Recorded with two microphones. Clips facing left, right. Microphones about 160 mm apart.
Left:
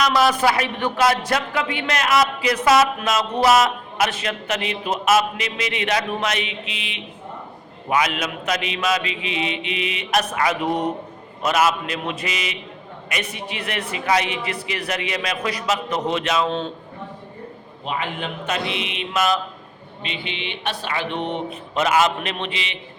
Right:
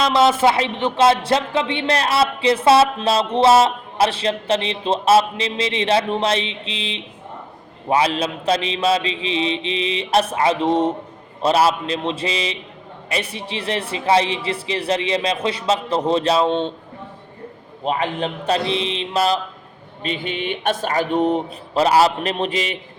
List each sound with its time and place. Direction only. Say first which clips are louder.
0.0 s speech: right 3 dB; 25° right (ahead or behind)
17.8 s speech: right 5 dB; 40° right (ahead or behind)
20.0 s speech: right 6 dB; 45° right (ahead or behind)